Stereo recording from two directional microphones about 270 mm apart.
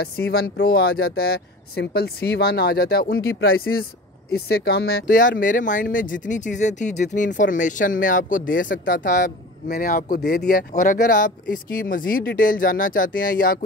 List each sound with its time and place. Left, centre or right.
0.0 s speech: left
3.4 s speech: left
4.3 s speech: left